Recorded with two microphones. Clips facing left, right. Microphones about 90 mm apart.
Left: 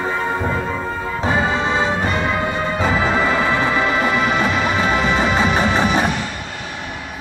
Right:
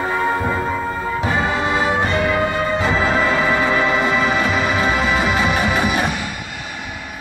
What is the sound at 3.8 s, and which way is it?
Music, centre (ahead or behind).